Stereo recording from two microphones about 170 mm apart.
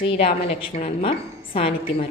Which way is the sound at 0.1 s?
35° left (ahead or behind).